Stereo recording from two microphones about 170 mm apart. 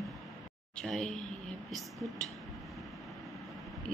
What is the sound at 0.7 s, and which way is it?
Speech, 5° left (ahead or behind).